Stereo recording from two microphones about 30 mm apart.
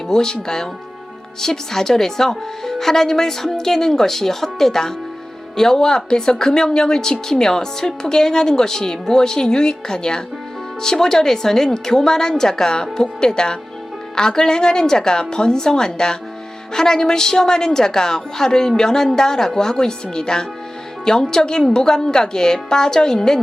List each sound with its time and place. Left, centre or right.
0.1 s speech: centre